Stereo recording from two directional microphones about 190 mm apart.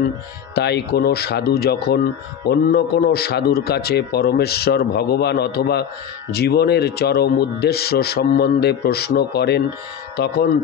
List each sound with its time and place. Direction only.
0.6 s speech: 60° left (ahead or behind)